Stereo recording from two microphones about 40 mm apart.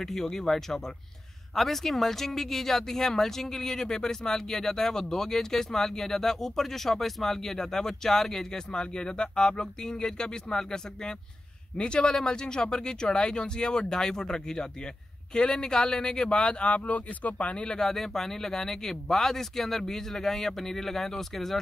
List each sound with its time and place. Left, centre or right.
0.0 s speech: centre; by 17.7 s left
17.7 s speech: centre